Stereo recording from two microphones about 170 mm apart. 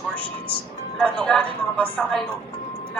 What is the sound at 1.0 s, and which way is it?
Speech, 5° left (ahead or behind).